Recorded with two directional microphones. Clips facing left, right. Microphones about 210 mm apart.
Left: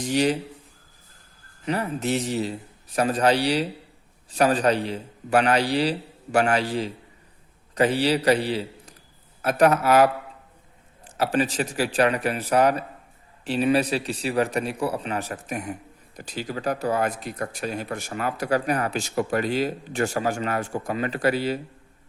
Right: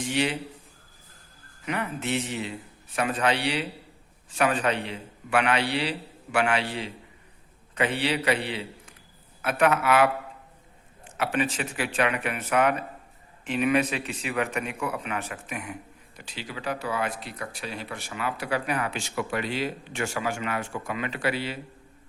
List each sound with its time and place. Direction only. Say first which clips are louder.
0.0 s speech: left 5 dB; 40° left (ahead or behind)
1.6 s speech: left 4 dB; 35° left (ahead or behind)